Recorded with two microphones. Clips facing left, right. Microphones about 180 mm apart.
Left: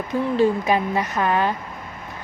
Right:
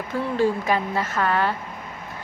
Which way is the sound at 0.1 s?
20° left (ahead or behind).